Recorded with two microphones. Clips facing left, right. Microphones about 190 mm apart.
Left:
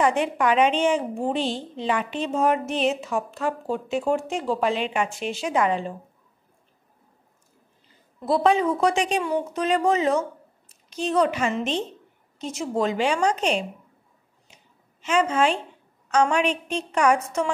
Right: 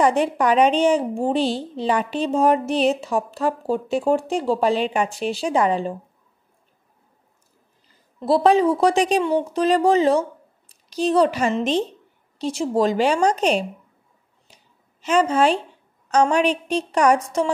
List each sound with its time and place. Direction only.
0.0 s a woman's voice: 35° right (ahead or behind)
8.2 s a woman's voice: 35° right (ahead or behind)
14.5 s a sound: 35° right (ahead or behind)
16.1 s a woman's voice: 40° right (ahead or behind)